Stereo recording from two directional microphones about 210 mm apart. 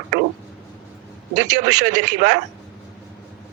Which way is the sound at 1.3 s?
35° right (ahead or behind).